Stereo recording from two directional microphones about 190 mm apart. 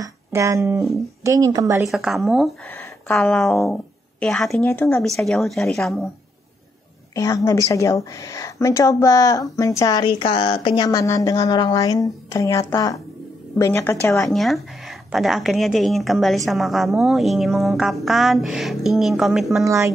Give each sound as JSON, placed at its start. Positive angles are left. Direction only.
{"t": 0.0, "sound": "a woman's voice", "side_deg": -15}
{"t": 1.9, "sound": "speech", "side_deg": 0}
{"t": 4.6, "sound": "a woman's voice", "side_deg": 15}
{"t": 5.0, "sound": "speech", "side_deg": 0}
{"t": 7.2, "sound": "a woman's voice", "side_deg": 15}
{"t": 14.3, "sound": "speech", "side_deg": 0}
{"t": 19.6, "sound": "a woman's voice", "side_deg": -15}